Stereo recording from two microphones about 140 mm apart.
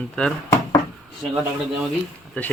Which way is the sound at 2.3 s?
10° left (ahead or behind).